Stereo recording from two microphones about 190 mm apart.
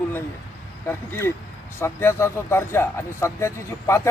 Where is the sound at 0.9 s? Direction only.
10° left (ahead or behind).